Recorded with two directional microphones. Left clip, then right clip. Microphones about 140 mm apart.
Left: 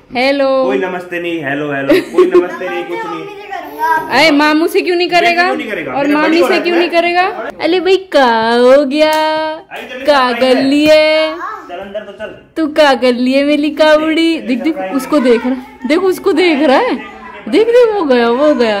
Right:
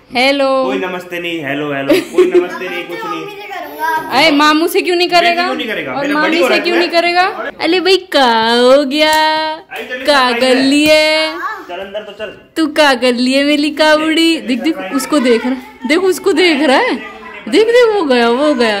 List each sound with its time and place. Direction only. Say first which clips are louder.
0.1 s a woman's voice: even; 10° right (ahead or behind)
4.1 s a woman's voice: right 1 dB; 5° left (ahead or behind)
6.1 s a woman's voice: left 1 dB; 25° left (ahead or behind)
6.5 s a woman's voice: even; centre (ahead or behind)
12.5 s a woman's voice: left 1 dB; centre (ahead or behind)